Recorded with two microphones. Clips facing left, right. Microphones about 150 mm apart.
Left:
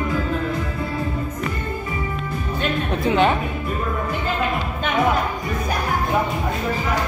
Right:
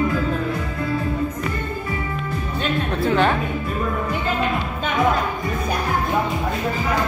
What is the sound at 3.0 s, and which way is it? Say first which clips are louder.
Speech: left 1 dB; 10° left (ahead or behind).